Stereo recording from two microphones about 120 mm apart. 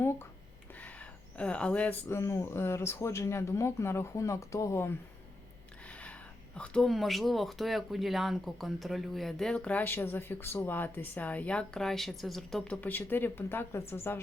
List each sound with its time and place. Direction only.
0.8 s speech: 10° left (ahead or behind)
5.9 s a sound: 10° left (ahead or behind)
6.6 s speech: 5° left (ahead or behind)